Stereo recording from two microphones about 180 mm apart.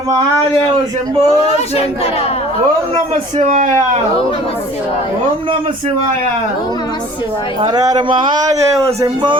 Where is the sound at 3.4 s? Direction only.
45° right (ahead or behind).